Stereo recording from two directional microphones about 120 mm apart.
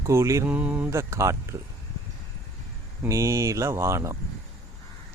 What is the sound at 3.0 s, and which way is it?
Speech, 25° right (ahead or behind).